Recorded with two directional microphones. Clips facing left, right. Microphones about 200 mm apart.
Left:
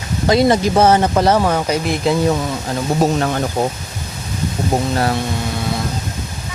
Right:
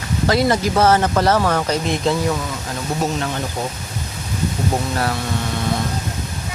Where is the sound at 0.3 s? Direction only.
20° left (ahead or behind).